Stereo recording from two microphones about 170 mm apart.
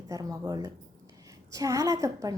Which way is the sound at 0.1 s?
20° right (ahead or behind).